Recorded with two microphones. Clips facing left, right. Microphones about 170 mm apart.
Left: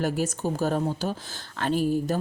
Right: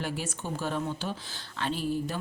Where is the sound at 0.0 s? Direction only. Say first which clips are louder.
Left 8 dB; 40° left (ahead or behind).